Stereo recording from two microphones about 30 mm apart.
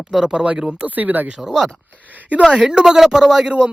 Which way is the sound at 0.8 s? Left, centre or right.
Right.